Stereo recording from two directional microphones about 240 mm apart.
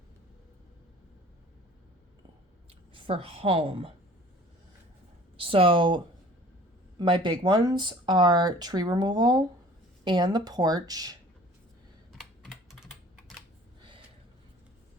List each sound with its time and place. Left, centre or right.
2.9 s a woman's voice: right
5.4 s speech: right
7.0 s speech: right
12.1 s computer keyboard: centre